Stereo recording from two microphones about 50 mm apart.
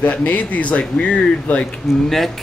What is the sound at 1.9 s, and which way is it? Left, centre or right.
Speech, centre.